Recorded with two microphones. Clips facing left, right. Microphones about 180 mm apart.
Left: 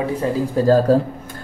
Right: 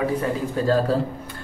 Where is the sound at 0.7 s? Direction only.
40° left (ahead or behind).